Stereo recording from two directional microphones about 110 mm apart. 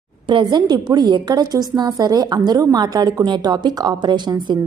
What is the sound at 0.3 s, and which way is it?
A woman's voice, 45° right (ahead or behind).